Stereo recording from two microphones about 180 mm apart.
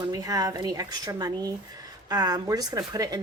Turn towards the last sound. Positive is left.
turn(degrees=-20)  # may be behind; listen again after turning